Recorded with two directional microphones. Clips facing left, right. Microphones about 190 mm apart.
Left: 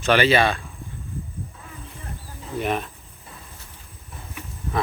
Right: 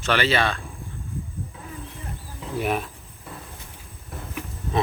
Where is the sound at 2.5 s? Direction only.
5° right (ahead or behind).